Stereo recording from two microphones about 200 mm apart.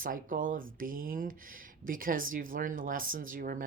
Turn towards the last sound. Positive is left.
turn(degrees=-45)  # may be behind; listen again after turning